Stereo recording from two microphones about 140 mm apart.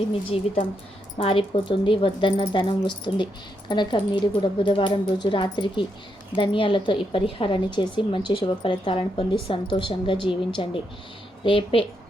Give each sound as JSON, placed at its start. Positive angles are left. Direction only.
{"t": 1.2, "sound": "a woman's voice", "side_deg": 40}